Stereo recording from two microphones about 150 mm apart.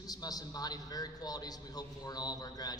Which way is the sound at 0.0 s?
25° left (ahead or behind).